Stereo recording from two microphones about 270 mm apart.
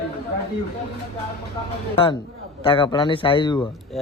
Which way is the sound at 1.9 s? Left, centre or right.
Centre.